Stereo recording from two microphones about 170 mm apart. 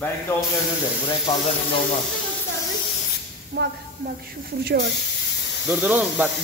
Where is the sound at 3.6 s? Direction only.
85° right.